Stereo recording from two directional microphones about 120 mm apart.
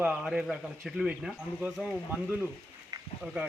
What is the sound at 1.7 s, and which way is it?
Speech, centre (ahead or behind).